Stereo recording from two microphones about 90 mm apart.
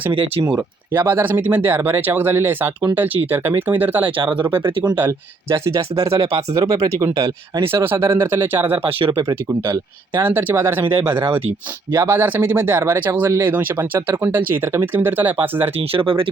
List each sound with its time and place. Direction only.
0.4 s speech: 25° right (ahead or behind)
4.2 s speech: 65° right (ahead or behind)
4.9 s speech: 25° right (ahead or behind)
7.1 s speech: 50° right (ahead or behind)
7.6 s speech: 25° right (ahead or behind)
8.8 s speech: 85° right
9.1 s speech: 30° right (ahead or behind)
15.8 s speech: 85° right